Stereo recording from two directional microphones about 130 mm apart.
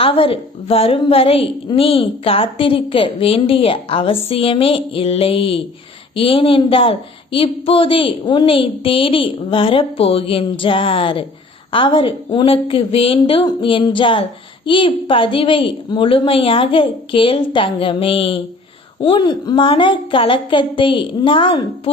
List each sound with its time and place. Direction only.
0.0 s a woman's voice: 45° left (ahead or behind)